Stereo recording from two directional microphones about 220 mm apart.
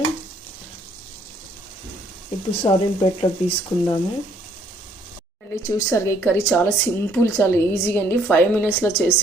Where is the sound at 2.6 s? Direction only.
25° left (ahead or behind).